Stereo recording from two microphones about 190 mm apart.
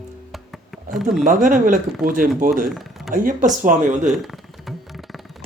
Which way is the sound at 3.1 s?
45° right (ahead or behind).